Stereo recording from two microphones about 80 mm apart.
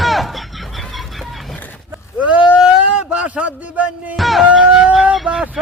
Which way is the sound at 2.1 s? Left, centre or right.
Centre.